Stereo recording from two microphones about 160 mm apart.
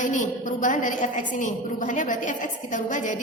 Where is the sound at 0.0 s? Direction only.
55° left (ahead or behind).